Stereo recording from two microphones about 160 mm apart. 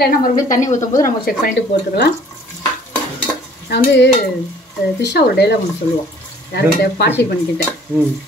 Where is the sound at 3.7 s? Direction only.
90° left.